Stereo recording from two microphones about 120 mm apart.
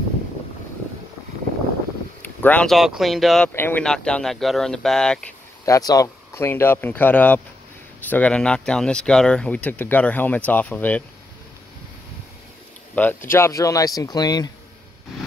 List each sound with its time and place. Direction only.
2.4 s speech: 10° left (ahead or behind)
3.0 s speech: centre (ahead or behind)
3.4 s speech: 15° left (ahead or behind)
5.7 s speech: 30° left (ahead or behind); by 11.1 s 10° left (ahead or behind)
13.0 s speech: 15° left (ahead or behind)
13.3 s speech: 25° left (ahead or behind)